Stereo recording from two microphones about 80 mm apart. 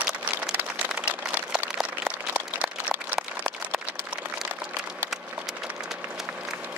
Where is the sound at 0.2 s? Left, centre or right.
Centre.